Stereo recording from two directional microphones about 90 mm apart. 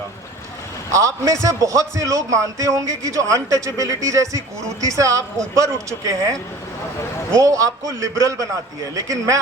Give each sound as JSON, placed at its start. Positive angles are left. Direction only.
{"t": 0.9, "sound": "a man's voice", "side_deg": -35}
{"t": 7.3, "sound": "a man's voice", "side_deg": -35}